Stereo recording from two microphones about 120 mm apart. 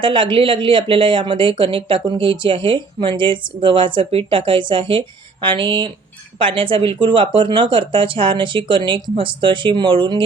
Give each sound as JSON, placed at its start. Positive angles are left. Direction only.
{"t": 0.0, "sound": "speech", "side_deg": -45}